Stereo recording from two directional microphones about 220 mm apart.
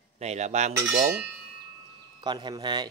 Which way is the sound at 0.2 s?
30° right (ahead or behind).